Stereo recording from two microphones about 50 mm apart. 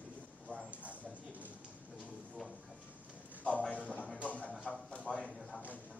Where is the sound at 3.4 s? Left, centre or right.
Left.